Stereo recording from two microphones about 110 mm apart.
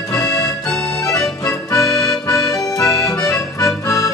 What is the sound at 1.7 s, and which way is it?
Accordion, 35° left (ahead or behind).